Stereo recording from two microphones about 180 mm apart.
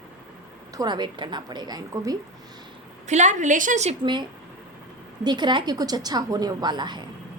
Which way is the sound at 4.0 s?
25° right (ahead or behind).